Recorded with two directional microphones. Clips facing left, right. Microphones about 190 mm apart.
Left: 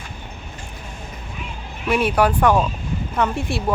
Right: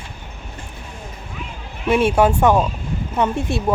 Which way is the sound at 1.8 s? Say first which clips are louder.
Right 3 dB; 25° right (ahead or behind).